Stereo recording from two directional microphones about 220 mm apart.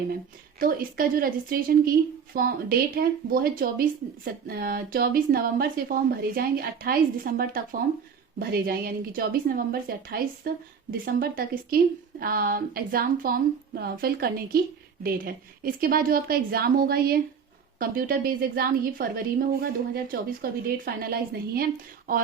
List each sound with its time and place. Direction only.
0.6 s a woman's voice: 40° right (ahead or behind)